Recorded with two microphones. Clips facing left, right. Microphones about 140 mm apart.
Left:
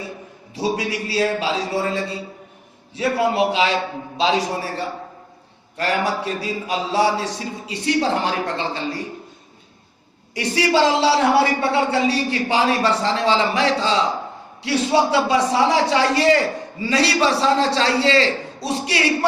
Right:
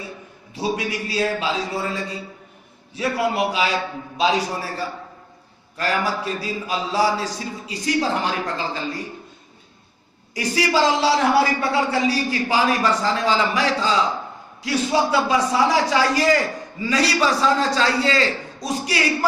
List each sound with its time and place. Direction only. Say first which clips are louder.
0.5 s a man's voice: left 2 dB; 30° left (ahead or behind)
10.3 s a man's voice: left 2 dB; 30° left (ahead or behind)